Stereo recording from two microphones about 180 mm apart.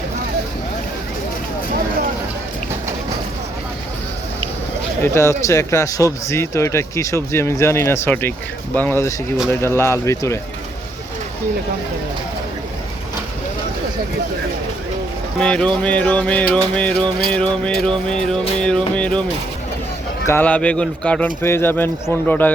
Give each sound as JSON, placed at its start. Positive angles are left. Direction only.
{"t": 5.0, "sound": "speech", "side_deg": 15}
{"t": 15.4, "sound": "speech", "side_deg": 5}
{"t": 17.3, "sound": "music", "side_deg": 5}
{"t": 20.2, "sound": "speech", "side_deg": 10}